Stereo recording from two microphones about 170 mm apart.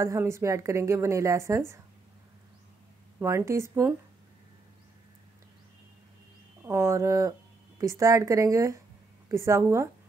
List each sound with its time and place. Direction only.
0.0 s speech: 15° right (ahead or behind)
3.2 s speech: 15° right (ahead or behind)
6.6 s speech: 15° right (ahead or behind)